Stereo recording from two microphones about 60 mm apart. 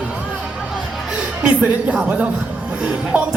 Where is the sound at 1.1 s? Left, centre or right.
Right.